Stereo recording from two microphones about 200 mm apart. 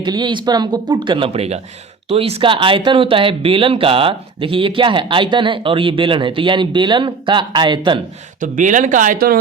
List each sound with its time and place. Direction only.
0.0 s speech: 20° right (ahead or behind)
8.4 s speech: 40° right (ahead or behind)